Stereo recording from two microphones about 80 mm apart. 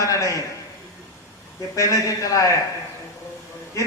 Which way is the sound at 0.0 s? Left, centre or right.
Left.